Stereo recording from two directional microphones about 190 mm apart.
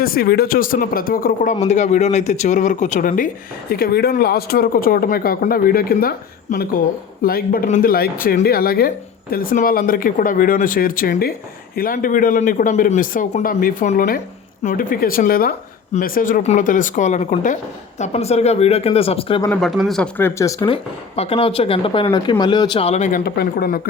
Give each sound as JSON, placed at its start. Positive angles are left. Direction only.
{"t": 0.0, "sound": "speech", "side_deg": 50}
{"t": 19.5, "sound": "speech", "side_deg": 0}
{"t": 21.2, "sound": "speech", "side_deg": 30}